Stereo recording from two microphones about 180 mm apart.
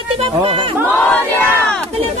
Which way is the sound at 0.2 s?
30° right (ahead or behind).